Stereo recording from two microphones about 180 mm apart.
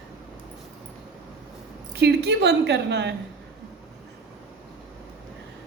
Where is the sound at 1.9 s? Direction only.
70° right (ahead or behind).